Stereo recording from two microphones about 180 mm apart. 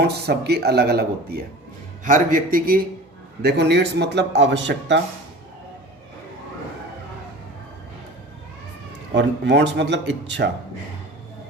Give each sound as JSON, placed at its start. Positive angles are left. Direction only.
{"t": 0.0, "sound": "speech", "side_deg": -65}
{"t": 2.0, "sound": "speech", "side_deg": -50}
{"t": 3.4, "sound": "speech", "side_deg": -65}
{"t": 9.1, "sound": "speech", "side_deg": -75}